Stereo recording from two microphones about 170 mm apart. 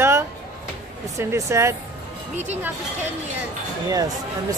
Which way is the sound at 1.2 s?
15° right (ahead or behind).